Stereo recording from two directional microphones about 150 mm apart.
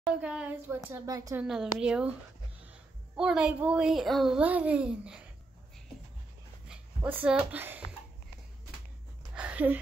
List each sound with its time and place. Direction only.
0.0 s a child's voice: 5° right (ahead or behind)
0.8 s a woman's voice: 20° right (ahead or behind)
1.4 s a woman's voice: 5° right (ahead or behind)
3.2 s a child's voice: 5° right (ahead or behind)
6.7 s speech: 10° right (ahead or behind)
9.3 s a sound: 10° right (ahead or behind)